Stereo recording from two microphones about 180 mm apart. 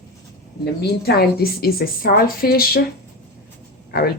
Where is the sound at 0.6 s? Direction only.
65° left (ahead or behind).